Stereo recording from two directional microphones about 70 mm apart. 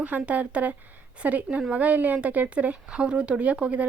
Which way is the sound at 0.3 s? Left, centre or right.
Centre.